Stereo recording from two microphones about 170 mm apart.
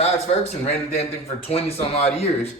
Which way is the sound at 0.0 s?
35° left (ahead or behind).